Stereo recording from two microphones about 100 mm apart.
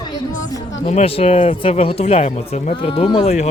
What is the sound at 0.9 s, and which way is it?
Speech, 80° left.